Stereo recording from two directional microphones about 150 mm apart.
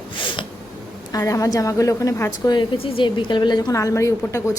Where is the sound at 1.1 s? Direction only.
20° left (ahead or behind).